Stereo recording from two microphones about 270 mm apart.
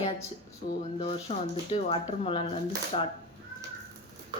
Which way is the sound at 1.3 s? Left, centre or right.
Left.